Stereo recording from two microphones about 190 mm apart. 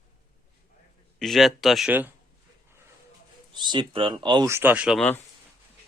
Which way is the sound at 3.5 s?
25° right (ahead or behind).